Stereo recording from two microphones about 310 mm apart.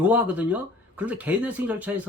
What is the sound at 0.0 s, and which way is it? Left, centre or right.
Speech, centre.